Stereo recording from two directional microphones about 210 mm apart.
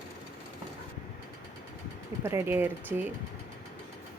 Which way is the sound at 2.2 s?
10° right (ahead or behind).